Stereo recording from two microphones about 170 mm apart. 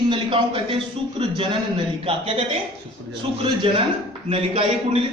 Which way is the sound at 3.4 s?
30° right (ahead or behind).